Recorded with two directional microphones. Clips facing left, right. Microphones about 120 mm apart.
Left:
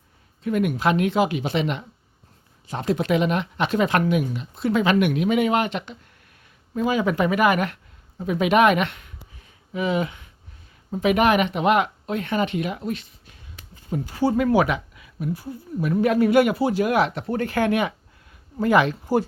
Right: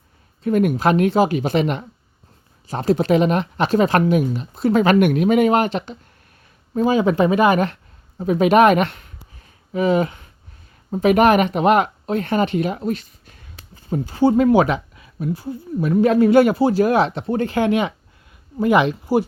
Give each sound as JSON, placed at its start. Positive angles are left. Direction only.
{"t": 0.4, "sound": "speech", "side_deg": -40}